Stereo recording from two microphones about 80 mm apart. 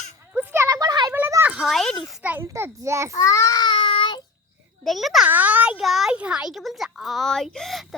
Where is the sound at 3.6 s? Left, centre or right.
Left.